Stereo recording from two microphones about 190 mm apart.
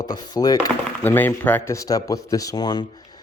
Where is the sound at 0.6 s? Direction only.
10° left (ahead or behind).